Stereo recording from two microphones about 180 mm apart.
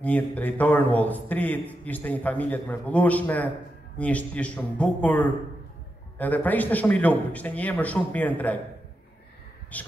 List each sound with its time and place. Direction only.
0.0 s a man's voice: 10° left (ahead or behind)
9.7 s a man's voice: 10° left (ahead or behind)